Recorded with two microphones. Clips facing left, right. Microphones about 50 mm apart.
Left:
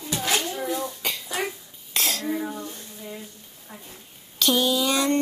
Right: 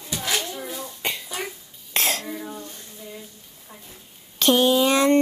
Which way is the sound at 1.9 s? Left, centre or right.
Right.